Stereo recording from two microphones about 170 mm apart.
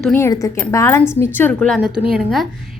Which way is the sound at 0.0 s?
10° left (ahead or behind).